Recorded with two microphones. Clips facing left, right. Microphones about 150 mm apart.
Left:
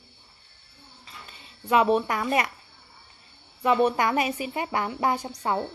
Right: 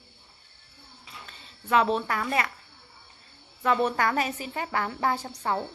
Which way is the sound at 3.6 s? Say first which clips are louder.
Left 3 dB; 15° left (ahead or behind).